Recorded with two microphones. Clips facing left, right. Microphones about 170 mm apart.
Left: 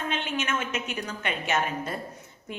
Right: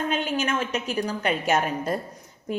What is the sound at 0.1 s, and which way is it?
A woman's voice, 40° right (ahead or behind).